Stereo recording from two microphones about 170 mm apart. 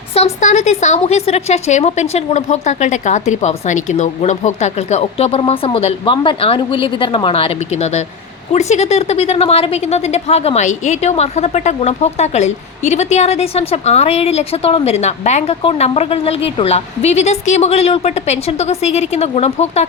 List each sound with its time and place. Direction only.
0.4 s a woman's voice: 45° left (ahead or behind)